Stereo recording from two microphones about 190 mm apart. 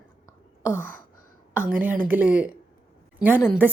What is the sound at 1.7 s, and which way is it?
A woman's voice, 10° right (ahead or behind).